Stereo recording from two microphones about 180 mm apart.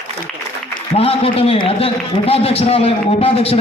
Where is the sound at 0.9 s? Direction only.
30° left (ahead or behind).